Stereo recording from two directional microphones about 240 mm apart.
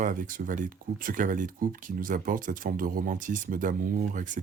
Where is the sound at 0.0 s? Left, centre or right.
Right.